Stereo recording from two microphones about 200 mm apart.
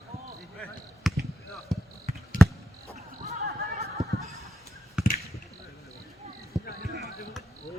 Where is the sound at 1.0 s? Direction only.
Centre (ahead or behind).